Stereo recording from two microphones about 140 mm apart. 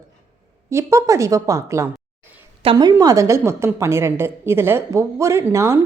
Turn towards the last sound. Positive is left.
turn(degrees=-20)  # may be behind; listen again after turning